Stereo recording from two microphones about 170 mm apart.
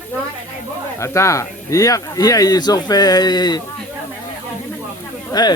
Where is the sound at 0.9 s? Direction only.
15° left (ahead or behind).